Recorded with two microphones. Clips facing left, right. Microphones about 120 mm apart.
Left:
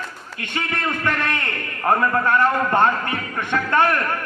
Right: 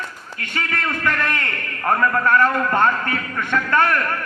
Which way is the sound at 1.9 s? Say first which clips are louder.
Even; 20° left (ahead or behind).